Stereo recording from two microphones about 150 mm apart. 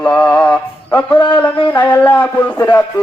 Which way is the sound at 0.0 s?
10° left (ahead or behind).